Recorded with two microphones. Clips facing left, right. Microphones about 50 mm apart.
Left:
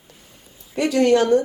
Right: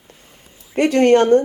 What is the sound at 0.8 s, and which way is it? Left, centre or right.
Speech, right.